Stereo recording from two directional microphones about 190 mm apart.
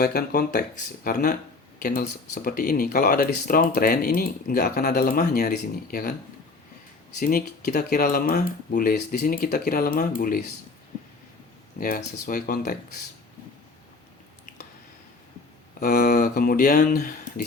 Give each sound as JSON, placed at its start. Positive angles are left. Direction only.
{"t": 0.0, "sound": "speech", "side_deg": 55}
{"t": 7.2, "sound": "speech", "side_deg": 50}
{"t": 11.8, "sound": "speech", "side_deg": 50}
{"t": 15.8, "sound": "speech", "side_deg": 45}